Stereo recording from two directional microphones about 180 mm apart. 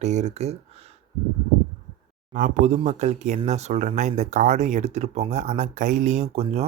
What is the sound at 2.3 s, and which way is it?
Speech, 45° right (ahead or behind).